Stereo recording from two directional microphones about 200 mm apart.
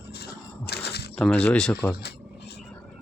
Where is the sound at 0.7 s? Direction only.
55° left (ahead or behind).